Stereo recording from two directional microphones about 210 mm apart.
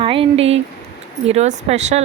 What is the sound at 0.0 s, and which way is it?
Speech, 25° right (ahead or behind).